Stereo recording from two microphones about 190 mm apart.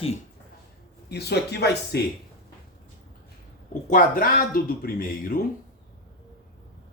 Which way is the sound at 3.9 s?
45° left (ahead or behind).